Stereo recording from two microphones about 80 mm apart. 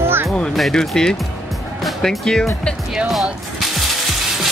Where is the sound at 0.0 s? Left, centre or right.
Right.